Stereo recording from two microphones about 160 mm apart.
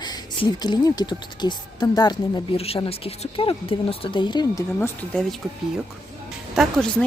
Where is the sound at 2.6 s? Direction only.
35° left (ahead or behind).